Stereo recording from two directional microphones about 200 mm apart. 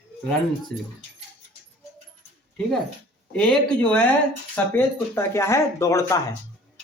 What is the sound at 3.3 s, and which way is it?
Speech, 5° left (ahead or behind).